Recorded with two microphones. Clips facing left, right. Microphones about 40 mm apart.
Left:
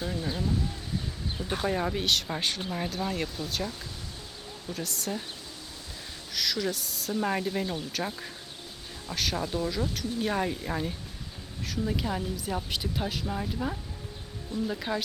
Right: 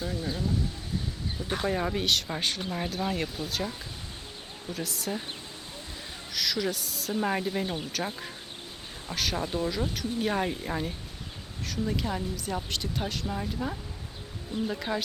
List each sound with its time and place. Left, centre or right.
0.0 s speech: centre
1.5 s speech: centre
6.3 s speech: centre
7.6 s speech: centre
7.9 s speech: centre